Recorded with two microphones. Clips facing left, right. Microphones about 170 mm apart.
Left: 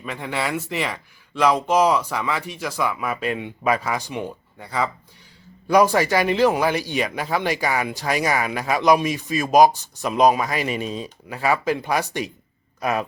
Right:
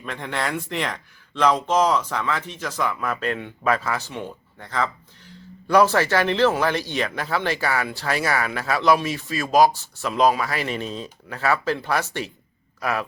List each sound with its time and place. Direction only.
0.0 s speech: 5° left (ahead or behind)